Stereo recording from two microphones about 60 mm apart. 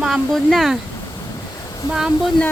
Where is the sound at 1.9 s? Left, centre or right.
Centre.